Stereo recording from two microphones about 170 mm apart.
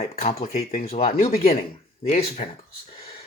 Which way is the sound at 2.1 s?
40° left (ahead or behind).